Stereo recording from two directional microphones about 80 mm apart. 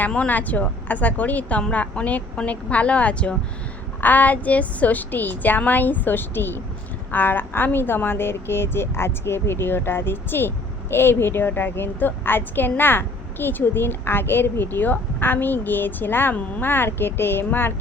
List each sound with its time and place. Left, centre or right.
0.1 s a woman's voice: centre